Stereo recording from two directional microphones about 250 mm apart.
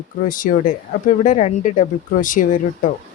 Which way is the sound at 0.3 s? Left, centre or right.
Left.